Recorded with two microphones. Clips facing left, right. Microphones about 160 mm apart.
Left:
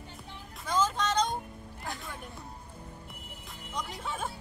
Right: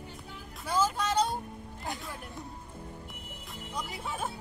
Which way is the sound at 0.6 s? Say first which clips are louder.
Even; 10° right (ahead or behind).